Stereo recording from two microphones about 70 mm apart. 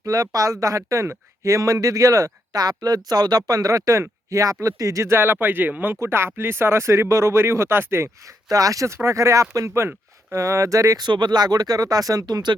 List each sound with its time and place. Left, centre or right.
0.0 s speech: right
2.6 s speech: right
5.1 s speech: right
8.4 s speech: right
11.0 s speech: right